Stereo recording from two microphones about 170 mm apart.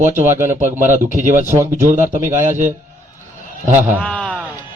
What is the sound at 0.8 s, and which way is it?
Speech, 45° right (ahead or behind).